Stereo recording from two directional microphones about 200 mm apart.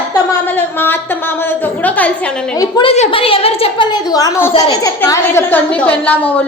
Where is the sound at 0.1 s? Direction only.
10° left (ahead or behind).